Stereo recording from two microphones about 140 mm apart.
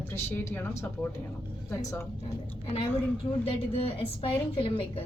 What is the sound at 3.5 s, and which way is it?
A woman's voice, 40° left (ahead or behind).